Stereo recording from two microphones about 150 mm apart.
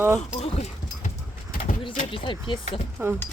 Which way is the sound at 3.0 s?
15° right (ahead or behind).